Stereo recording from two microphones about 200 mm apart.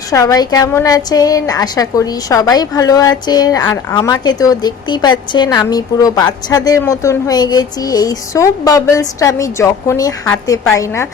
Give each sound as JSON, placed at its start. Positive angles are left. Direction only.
{"t": 0.1, "sound": "a woman's voice", "side_deg": 15}